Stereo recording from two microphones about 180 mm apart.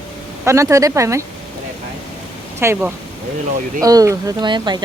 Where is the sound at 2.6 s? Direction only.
15° right (ahead or behind).